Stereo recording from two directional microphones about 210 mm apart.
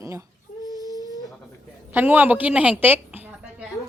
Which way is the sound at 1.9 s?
10° right (ahead or behind).